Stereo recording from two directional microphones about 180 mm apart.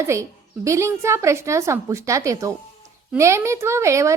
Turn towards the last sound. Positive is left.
turn(degrees=-15)  # may be behind; listen again after turning